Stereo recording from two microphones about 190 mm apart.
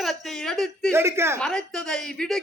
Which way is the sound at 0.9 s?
15° right (ahead or behind).